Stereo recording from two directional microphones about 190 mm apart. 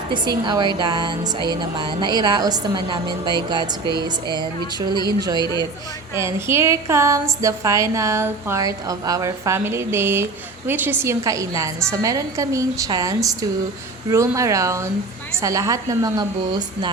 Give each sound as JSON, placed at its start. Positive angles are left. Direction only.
{"t": 0.1, "sound": "a woman's voice", "side_deg": -20}